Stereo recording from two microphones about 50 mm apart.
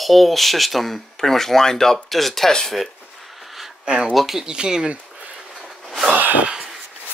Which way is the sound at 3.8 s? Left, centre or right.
Centre.